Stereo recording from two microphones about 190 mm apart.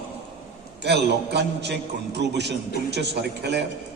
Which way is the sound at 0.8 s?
60° right (ahead or behind).